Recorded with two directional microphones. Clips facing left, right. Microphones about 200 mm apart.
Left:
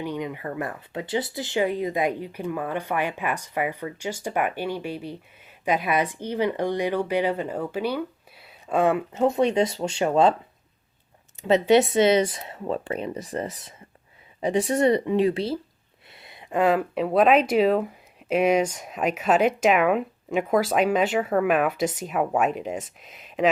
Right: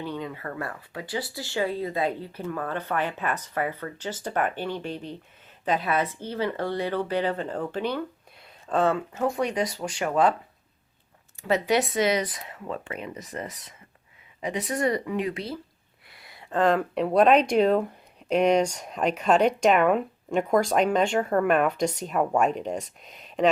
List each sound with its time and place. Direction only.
0.0 s speech: 15° left (ahead or behind)
11.4 s speech: 25° left (ahead or behind); by 23.5 s 5° left (ahead or behind)